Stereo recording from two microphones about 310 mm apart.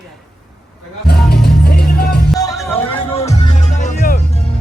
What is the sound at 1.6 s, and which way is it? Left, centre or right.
Music, left.